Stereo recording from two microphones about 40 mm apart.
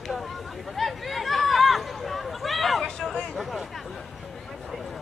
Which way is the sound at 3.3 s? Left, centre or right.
Centre.